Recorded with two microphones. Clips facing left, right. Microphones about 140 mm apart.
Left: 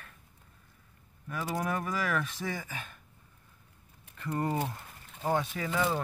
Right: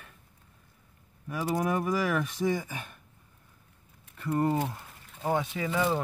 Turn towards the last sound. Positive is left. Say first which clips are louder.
# right 2 dB
turn(degrees=-10)  # may be behind; listen again after turning